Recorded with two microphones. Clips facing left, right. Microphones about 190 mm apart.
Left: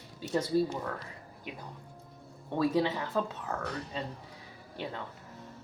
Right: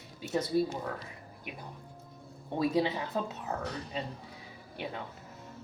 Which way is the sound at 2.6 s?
15° right (ahead or behind).